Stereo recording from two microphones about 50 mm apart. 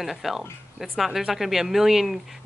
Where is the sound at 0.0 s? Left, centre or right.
Centre.